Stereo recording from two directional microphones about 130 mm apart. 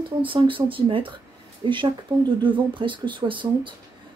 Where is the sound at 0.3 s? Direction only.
40° right (ahead or behind).